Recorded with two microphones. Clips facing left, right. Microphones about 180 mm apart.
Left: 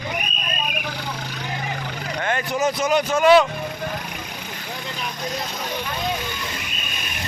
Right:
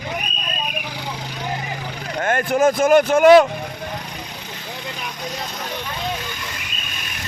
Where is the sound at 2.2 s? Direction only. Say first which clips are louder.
Right 5 dB; 50° right (ahead or behind).